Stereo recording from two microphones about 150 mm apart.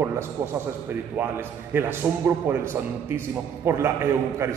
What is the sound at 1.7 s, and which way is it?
A man's voice, 15° right (ahead or behind).